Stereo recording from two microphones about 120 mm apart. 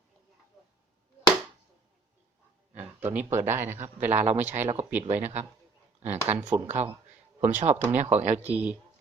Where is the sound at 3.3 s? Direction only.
20° right (ahead or behind).